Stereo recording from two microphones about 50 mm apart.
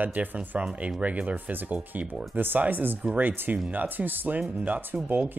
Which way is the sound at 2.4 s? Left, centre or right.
Right.